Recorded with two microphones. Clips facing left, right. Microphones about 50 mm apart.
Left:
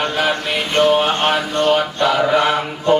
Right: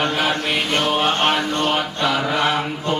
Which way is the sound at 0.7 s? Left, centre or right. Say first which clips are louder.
Left 6 dB; centre.